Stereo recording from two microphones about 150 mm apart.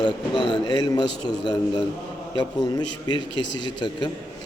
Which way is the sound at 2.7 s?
30° left (ahead or behind).